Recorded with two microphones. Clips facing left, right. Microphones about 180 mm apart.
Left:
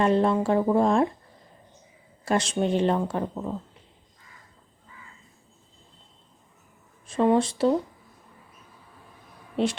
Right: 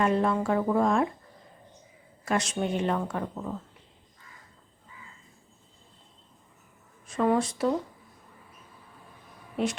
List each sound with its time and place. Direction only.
0.0 s speech: 30° left (ahead or behind)
2.2 s a woman's voice: 30° left (ahead or behind)
7.1 s speech: 25° left (ahead or behind)
9.6 s speech: 30° left (ahead or behind)